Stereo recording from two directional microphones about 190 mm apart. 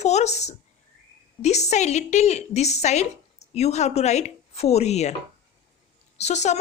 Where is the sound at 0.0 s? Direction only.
35° left (ahead or behind).